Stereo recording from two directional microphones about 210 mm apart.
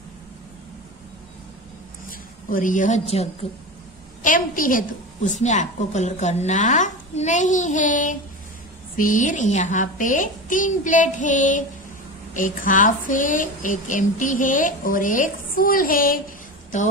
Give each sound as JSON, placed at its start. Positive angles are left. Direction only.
{"t": 2.0, "sound": "a woman's voice", "side_deg": 40}